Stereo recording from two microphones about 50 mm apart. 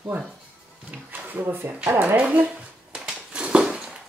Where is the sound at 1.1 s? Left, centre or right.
Right.